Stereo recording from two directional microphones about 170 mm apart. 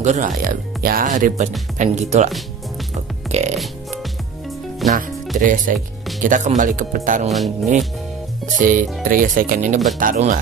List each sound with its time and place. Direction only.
0.0 s music: 45° right (ahead or behind)
4.8 s speech: centre (ahead or behind)
5.4 s music: 50° right (ahead or behind)
7.2 s music: centre (ahead or behind)
8.5 s music: 50° right (ahead or behind)